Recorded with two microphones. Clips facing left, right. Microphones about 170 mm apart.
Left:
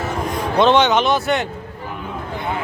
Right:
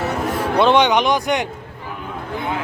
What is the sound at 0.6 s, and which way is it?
Speech, 10° right (ahead or behind).